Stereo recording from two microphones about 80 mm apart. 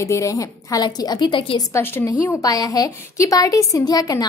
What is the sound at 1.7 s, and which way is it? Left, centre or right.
Speech, left.